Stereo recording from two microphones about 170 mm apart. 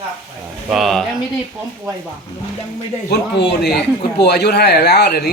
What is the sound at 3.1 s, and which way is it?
Speech, 75° left (ahead or behind).